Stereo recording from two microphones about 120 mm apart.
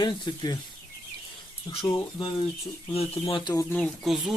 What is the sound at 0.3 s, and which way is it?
Speech, 40° left (ahead or behind).